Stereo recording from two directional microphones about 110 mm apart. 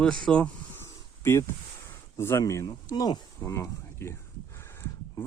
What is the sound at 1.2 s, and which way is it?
Speech, 25° left (ahead or behind).